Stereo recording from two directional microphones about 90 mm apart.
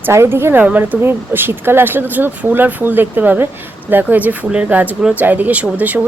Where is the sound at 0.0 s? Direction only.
25° right (ahead or behind).